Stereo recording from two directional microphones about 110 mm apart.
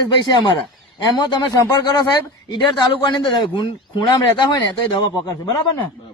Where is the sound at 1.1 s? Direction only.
40° left (ahead or behind).